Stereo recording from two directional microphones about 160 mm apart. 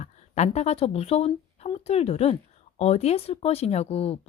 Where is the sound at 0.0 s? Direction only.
45° left (ahead or behind).